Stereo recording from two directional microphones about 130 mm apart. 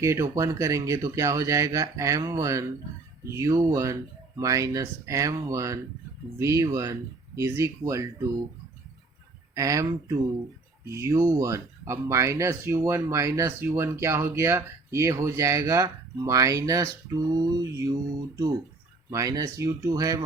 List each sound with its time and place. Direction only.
0.0 s speech: 20° right (ahead or behind)
9.6 s speech: 25° right (ahead or behind)
19.1 s speech: 30° right (ahead or behind)